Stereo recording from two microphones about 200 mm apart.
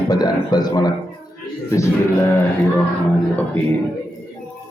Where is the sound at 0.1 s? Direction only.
20° left (ahead or behind).